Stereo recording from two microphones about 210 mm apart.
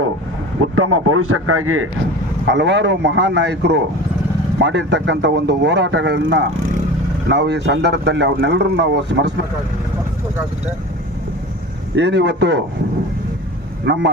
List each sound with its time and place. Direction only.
0.6 s a man's voice: 90° right
2.5 s speech: 60° right (ahead or behind)
11.9 s speech: 55° right (ahead or behind)
13.8 s speech: 55° right (ahead or behind)